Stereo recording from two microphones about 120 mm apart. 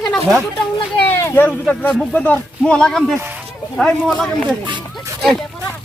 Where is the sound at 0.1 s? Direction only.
Centre (ahead or behind).